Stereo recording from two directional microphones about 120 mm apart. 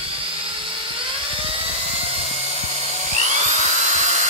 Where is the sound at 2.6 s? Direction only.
65° right (ahead or behind).